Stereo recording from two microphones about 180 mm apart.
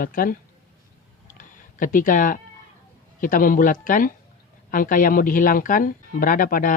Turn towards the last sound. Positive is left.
turn(degrees=50)  # may be behind; listen again after turning